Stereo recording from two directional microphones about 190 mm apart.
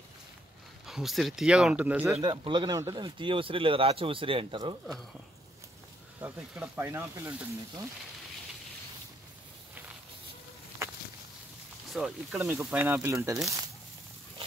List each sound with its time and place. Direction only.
0.8 s speech: centre (ahead or behind)
2.1 s speech: 25° right (ahead or behind)
6.2 s speech: 10° right (ahead or behind)
11.9 s speech: 5° right (ahead or behind)